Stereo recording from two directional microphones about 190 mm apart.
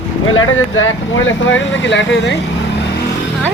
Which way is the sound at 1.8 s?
70° left (ahead or behind).